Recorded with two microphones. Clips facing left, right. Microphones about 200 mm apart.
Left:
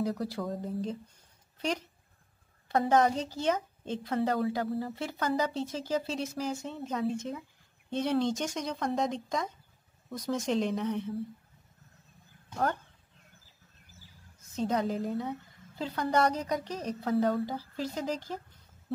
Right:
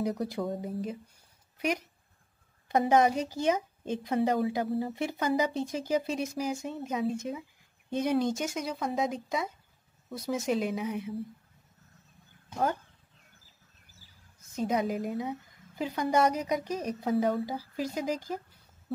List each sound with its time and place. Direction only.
0.0 s speech: 20° right (ahead or behind)
0.5 s a woman's voice: 5° right (ahead or behind)
12.4 s dog: 10° right (ahead or behind)
14.5 s a woman's voice: 10° right (ahead or behind)